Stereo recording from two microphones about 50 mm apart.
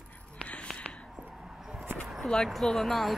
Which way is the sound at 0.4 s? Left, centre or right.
Left.